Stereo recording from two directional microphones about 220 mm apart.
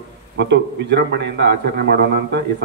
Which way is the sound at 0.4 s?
50° right (ahead or behind).